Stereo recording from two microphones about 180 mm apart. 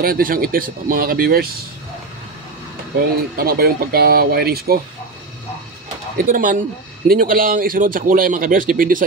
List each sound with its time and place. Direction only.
0.0 s speech: 55° right (ahead or behind)
3.3 s speech: 60° right (ahead or behind)
6.1 s speech: 50° right (ahead or behind)